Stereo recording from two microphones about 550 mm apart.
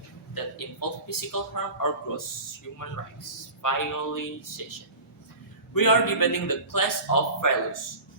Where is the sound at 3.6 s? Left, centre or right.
Left.